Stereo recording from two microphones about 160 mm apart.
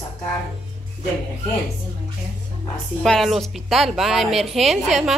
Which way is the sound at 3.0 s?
Centre (ahead or behind).